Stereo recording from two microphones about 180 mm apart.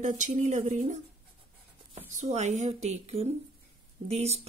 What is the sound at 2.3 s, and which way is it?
Speech, 40° right (ahead or behind).